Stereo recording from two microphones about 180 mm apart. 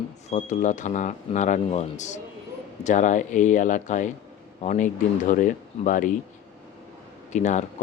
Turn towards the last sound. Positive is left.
turn(degrees=40)  # may be behind; listen again after turning